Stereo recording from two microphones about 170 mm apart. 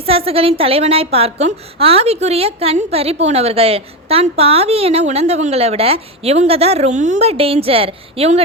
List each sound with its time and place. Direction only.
0.0 s a woman's voice: 35° right (ahead or behind)